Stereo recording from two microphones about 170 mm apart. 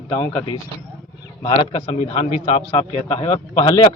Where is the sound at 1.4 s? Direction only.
30° left (ahead or behind).